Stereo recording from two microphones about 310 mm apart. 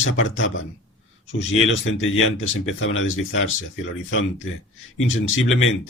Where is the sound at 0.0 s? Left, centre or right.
Left.